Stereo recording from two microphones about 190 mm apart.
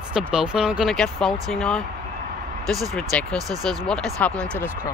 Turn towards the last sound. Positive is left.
turn(degrees=5)  # may be behind; listen again after turning